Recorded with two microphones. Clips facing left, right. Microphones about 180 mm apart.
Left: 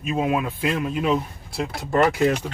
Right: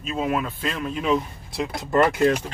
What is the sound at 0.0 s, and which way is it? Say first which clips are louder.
Speech: left 2 dB; 15° left (ahead or behind).